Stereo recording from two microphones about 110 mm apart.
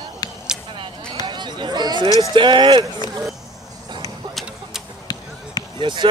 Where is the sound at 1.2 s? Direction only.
45° right (ahead or behind).